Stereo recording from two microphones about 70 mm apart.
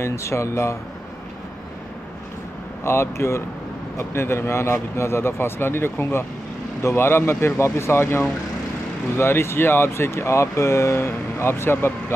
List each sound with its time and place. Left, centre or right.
0.0 s speech: left
2.8 s speech: left